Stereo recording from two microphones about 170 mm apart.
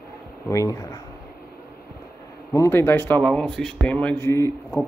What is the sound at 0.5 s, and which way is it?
Speech, 20° left (ahead or behind).